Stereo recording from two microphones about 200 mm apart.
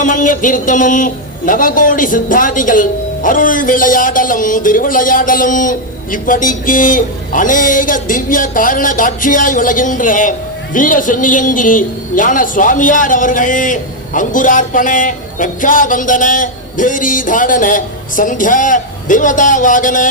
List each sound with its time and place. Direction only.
0.0 s a man's voice: 40° left (ahead or behind)